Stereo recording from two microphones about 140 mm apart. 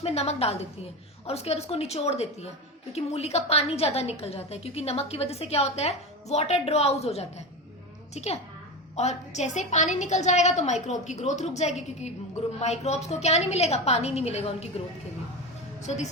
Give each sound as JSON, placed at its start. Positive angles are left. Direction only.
{"t": 0.0, "sound": "a woman's voice", "side_deg": 50}